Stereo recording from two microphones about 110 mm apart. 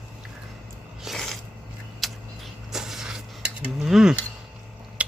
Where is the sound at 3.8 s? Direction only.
5° right (ahead or behind).